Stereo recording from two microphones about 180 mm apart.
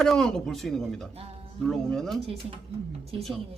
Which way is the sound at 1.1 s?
35° right (ahead or behind).